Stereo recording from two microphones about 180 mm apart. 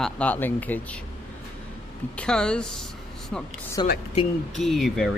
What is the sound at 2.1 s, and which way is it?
Speech, 5° left (ahead or behind).